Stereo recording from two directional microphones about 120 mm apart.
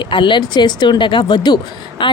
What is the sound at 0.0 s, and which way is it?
A woman's voice, 40° left (ahead or behind).